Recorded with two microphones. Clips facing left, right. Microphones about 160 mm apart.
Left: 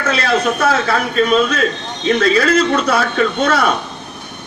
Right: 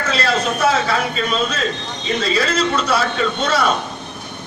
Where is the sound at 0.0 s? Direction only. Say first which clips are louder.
Left 3 dB; 55° left (ahead or behind).